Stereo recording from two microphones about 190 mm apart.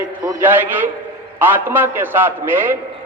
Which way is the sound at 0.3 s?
10° right (ahead or behind).